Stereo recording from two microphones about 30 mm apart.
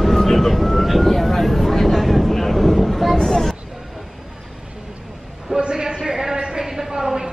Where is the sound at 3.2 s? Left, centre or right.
Left.